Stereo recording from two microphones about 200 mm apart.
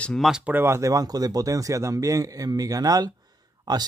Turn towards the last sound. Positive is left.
turn(degrees=-20)  # may be behind; listen again after turning